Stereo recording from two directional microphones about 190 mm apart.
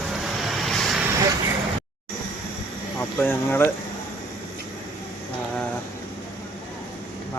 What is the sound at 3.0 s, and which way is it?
Speech, 10° left (ahead or behind).